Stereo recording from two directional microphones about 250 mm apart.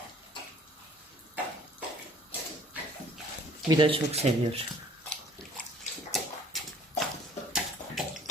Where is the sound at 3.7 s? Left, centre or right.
Centre.